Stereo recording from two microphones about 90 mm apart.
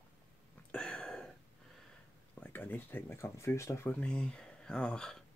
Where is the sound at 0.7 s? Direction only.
10° left (ahead or behind).